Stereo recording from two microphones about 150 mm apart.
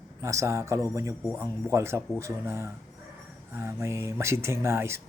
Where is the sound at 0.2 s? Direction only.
20° right (ahead or behind).